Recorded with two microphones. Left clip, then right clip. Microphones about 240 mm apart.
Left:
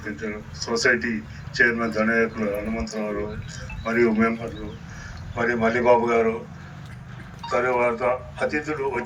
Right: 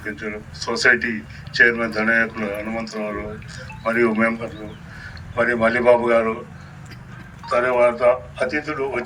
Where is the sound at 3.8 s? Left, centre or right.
Right.